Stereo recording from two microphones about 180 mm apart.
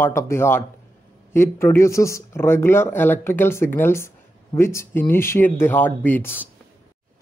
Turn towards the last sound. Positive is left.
turn(degrees=10)  # may be behind; listen again after turning